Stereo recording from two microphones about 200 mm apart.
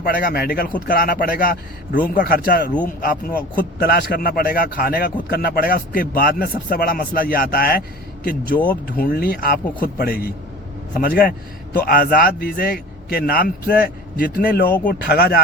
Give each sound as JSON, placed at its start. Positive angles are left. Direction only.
{"t": 0.0, "sound": "a man's voice", "side_deg": 45}